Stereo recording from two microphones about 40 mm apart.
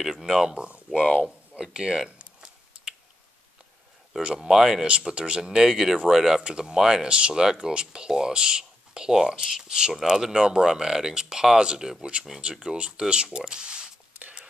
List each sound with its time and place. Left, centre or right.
0.0 s speech: centre
1.1 s a sound: centre
1.6 s speech: right
2.0 s typing: right
4.2 s speech: right
4.5 s speech: centre
5.0 s speech: right
5.4 s speech: centre